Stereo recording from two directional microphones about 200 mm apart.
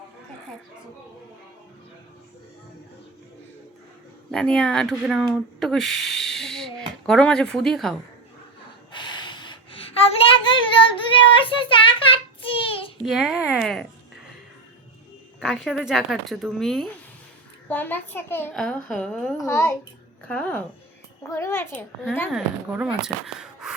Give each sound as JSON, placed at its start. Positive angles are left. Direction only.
{"t": 4.3, "sound": "speech", "side_deg": 5}
{"t": 8.9, "sound": "a sound", "side_deg": 25}
{"t": 10.7, "sound": "child singing", "side_deg": 25}
{"t": 13.1, "sound": "speech", "side_deg": -5}
{"t": 15.4, "sound": "speech", "side_deg": 0}
{"t": 19.4, "sound": "a child's voice", "side_deg": 15}
{"t": 22.3, "sound": "speech", "side_deg": -5}